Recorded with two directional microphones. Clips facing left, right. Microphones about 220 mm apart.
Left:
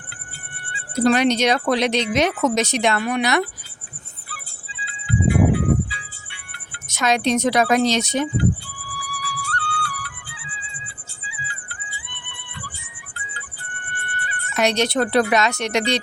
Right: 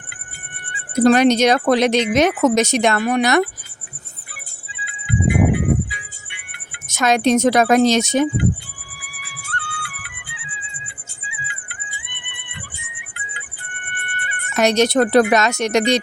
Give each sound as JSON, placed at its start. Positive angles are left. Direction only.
{"t": 0.7, "sound": "music", "side_deg": -15}
{"t": 1.0, "sound": "speech", "side_deg": -45}
{"t": 4.9, "sound": "music", "side_deg": -15}
{"t": 6.8, "sound": "speech", "side_deg": -45}
{"t": 9.0, "sound": "music", "side_deg": -20}
{"t": 14.5, "sound": "speech", "side_deg": -45}